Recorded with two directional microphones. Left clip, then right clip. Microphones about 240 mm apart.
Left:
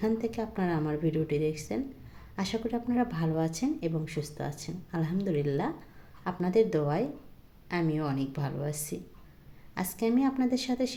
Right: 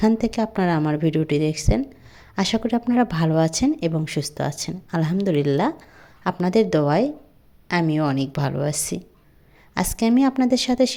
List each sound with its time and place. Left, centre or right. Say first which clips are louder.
0.0 s speech: right 10 dB; right